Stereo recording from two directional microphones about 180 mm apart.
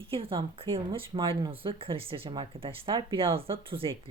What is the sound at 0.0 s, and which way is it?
Speech, 30° right (ahead or behind).